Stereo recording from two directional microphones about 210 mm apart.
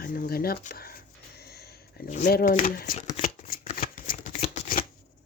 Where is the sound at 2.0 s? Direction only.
35° left (ahead or behind).